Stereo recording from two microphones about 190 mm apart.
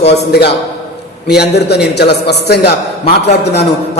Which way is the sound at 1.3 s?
60° left (ahead or behind).